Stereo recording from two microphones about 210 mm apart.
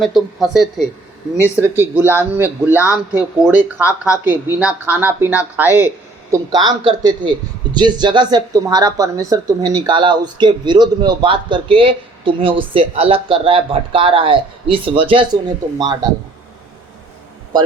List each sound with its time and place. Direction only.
0.0 s a man's voice: centre (ahead or behind); by 15.4 s 25° right (ahead or behind)